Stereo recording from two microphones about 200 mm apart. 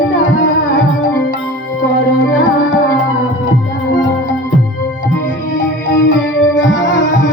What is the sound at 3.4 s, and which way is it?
Music, 65° left (ahead or behind).